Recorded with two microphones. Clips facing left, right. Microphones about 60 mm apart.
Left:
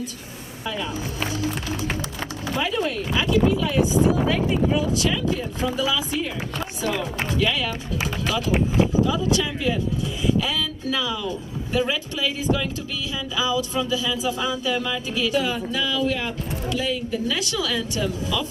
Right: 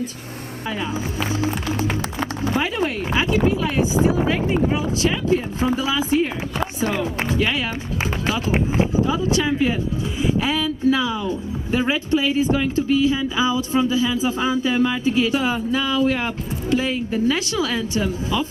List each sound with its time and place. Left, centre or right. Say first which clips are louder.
1.3 s speech: right 5 dB; right